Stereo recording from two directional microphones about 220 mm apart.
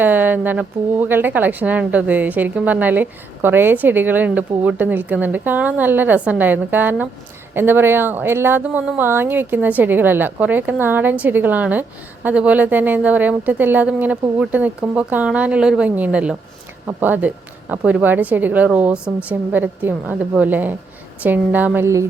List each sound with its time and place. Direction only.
0.0 s speech: 10° right (ahead or behind)